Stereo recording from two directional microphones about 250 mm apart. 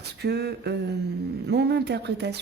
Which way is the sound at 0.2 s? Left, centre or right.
Right.